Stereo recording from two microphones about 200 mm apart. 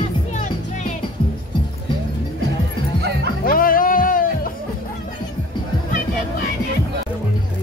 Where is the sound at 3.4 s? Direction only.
45° left (ahead or behind).